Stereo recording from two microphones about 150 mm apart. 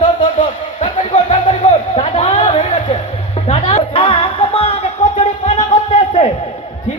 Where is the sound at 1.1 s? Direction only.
50° left (ahead or behind).